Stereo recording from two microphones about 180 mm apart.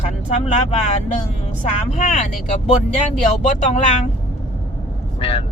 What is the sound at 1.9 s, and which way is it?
Speech, 40° left (ahead or behind).